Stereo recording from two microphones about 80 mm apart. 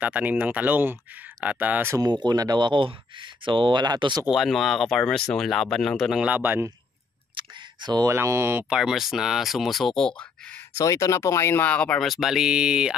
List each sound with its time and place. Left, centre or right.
0.0 s speech: centre
2.0 s speech: right
2.6 s speech: right
4.3 s speech: centre
6.1 s speech: centre
7.3 s camera: right
8.1 s speech: right
8.6 s speech: centre
10.8 s speech: left
11.6 s speech: centre
12.0 s speech: centre